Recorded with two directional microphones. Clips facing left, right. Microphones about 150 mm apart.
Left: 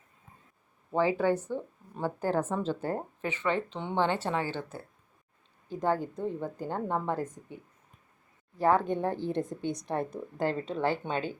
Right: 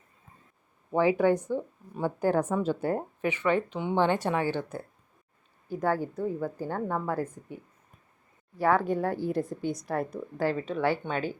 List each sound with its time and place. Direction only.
0.9 s speech: 15° right (ahead or behind)
6.0 s speech: 5° right (ahead or behind)
6.4 s speech: 20° left (ahead or behind)
8.6 s speech: 25° left (ahead or behind)
9.6 s a woman's voice: 5° right (ahead or behind)
9.9 s speech: 25° left (ahead or behind)